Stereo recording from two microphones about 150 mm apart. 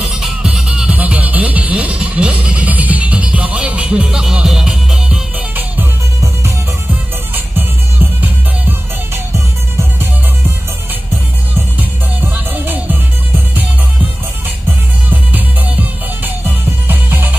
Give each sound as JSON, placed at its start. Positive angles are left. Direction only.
{"t": 0.0, "sound": "music", "side_deg": -5}
{"t": 5.8, "sound": "music", "side_deg": -15}
{"t": 8.2, "sound": "music", "side_deg": -15}
{"t": 12.2, "sound": "music", "side_deg": -15}
{"t": 16.4, "sound": "music", "side_deg": -15}